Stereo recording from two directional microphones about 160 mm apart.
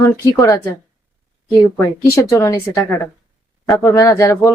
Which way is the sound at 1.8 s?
20° left (ahead or behind).